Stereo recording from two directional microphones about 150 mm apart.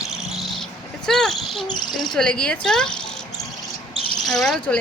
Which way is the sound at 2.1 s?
5° left (ahead or behind).